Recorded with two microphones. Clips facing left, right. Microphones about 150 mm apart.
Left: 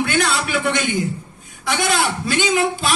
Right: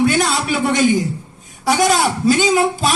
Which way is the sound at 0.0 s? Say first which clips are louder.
Right 4 dB; 40° right (ahead or behind).